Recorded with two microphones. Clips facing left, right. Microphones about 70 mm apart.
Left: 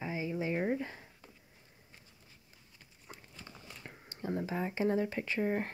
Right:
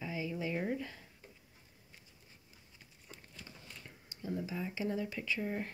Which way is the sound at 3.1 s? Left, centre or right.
Left.